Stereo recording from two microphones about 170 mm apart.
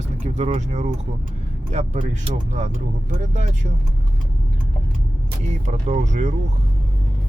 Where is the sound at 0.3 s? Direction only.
45° right (ahead or behind).